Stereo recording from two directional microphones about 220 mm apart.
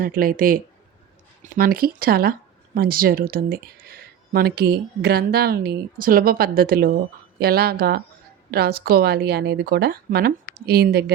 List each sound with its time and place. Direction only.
0.0 s speech: 40° right (ahead or behind)